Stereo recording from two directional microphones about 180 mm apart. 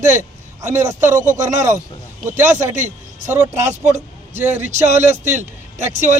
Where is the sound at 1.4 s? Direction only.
40° right (ahead or behind).